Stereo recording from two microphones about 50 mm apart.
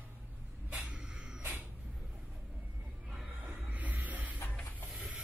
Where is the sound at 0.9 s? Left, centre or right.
Centre.